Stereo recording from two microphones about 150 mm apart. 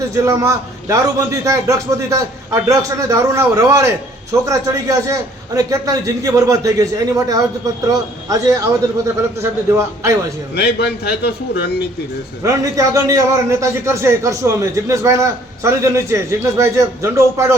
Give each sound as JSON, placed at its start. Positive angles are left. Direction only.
{"t": 0.1, "sound": "a man's voice", "side_deg": -20}
{"t": 10.5, "sound": "a man's voice", "side_deg": 90}
{"t": 12.4, "sound": "a man's voice", "side_deg": -20}